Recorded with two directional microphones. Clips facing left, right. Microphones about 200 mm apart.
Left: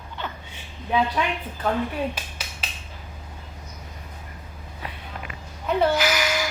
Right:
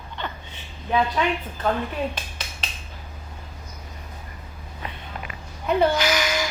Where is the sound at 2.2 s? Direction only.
10° left (ahead or behind).